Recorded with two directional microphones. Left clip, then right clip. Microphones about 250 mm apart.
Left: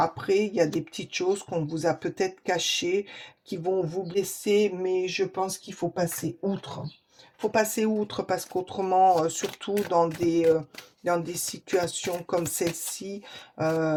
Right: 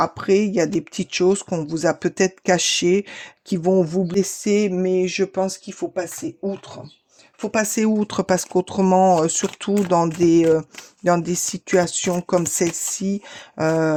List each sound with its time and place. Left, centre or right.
0.0 s speech: right
7.5 s speech: right